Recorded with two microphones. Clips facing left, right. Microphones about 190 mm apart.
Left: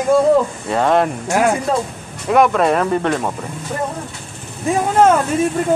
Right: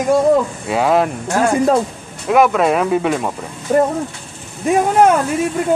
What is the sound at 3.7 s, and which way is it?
Speech, 55° right (ahead or behind).